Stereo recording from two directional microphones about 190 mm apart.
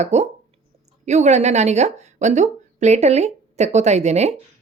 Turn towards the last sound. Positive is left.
turn(degrees=-35)  # may be behind; listen again after turning